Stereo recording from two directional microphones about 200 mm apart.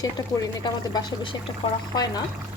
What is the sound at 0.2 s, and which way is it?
Speech, 20° left (ahead or behind).